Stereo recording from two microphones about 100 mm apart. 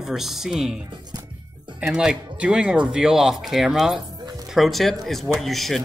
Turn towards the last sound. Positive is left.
turn(degrees=0)  # may be behind; listen again after turning